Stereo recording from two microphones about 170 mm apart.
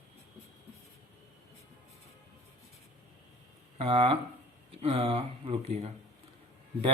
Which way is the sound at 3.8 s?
30° right (ahead or behind).